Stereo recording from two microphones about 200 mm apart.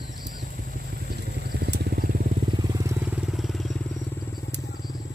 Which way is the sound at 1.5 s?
55° right (ahead or behind).